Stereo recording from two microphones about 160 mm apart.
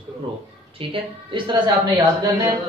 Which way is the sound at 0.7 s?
30° right (ahead or behind).